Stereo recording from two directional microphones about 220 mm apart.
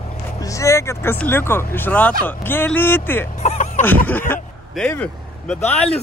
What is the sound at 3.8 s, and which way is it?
Speech, 10° left (ahead or behind).